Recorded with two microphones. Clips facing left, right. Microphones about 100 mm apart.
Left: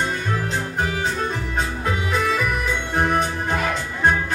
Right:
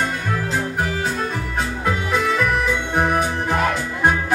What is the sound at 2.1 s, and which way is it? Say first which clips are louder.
Music: right 3 dB; centre (ahead or behind).